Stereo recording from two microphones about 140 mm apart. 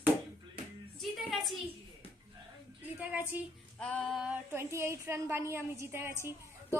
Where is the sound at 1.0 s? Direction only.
Centre (ahead or behind).